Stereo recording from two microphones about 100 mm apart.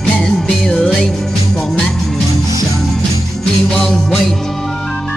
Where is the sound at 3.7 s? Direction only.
5° left (ahead or behind).